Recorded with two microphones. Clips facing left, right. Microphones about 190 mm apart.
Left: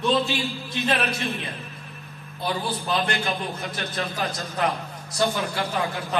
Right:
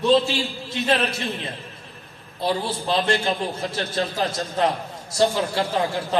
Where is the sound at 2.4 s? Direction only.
25° right (ahead or behind).